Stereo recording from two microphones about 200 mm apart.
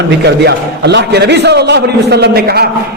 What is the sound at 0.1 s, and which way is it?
A man's voice, 55° right (ahead or behind).